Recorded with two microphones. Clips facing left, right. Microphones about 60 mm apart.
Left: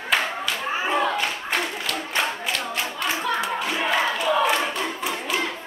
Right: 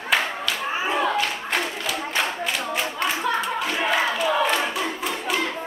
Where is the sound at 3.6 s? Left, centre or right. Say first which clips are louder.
Even; centre.